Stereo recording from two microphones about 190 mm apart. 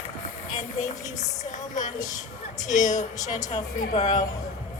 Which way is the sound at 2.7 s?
40° left (ahead or behind).